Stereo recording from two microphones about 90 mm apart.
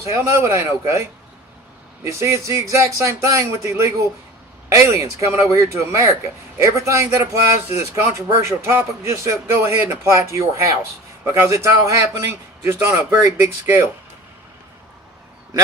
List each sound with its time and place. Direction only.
0.0 s a man's voice: 35° right (ahead or behind)
2.0 s a man's voice: 30° right (ahead or behind)